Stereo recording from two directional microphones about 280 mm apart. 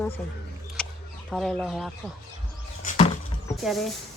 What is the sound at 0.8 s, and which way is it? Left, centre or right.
Single-lens reflex camera, centre.